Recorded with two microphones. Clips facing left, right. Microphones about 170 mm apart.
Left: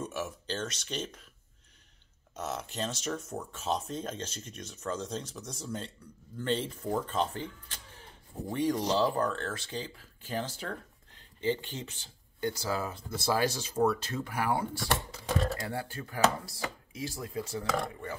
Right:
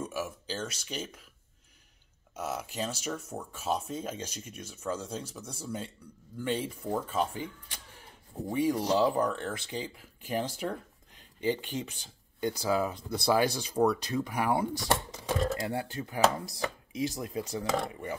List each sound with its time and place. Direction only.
0.0 s speech: 5° right (ahead or behind)
2.3 s speech: 10° right (ahead or behind)